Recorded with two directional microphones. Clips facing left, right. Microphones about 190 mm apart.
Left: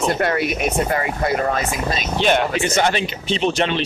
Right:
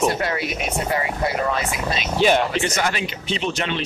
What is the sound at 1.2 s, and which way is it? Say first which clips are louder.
Speech: left 4 dB; 45° left (ahead or behind).